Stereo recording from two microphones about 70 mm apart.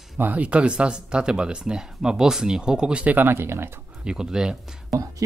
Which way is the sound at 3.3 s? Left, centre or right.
Right.